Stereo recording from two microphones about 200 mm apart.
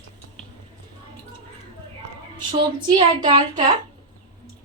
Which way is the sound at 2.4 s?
25° right (ahead or behind).